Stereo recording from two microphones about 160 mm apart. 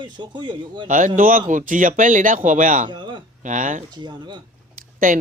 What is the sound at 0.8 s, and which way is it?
Speech, 55° right (ahead or behind).